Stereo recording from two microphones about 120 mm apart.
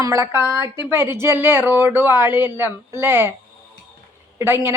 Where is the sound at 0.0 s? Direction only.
25° right (ahead or behind).